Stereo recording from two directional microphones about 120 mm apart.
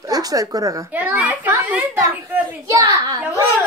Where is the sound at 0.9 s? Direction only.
15° right (ahead or behind).